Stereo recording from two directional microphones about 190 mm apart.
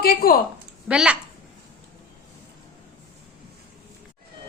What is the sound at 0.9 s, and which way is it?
Speech, 5° right (ahead or behind).